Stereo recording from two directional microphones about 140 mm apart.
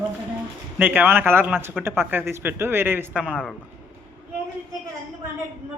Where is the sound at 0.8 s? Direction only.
10° right (ahead or behind).